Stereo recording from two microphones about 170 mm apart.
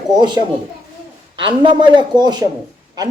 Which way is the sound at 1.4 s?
30° right (ahead or behind).